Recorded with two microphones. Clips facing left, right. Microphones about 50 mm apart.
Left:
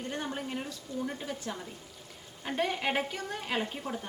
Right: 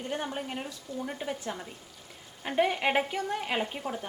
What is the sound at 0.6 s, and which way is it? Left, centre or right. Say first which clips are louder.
A woman's voice: even; centre.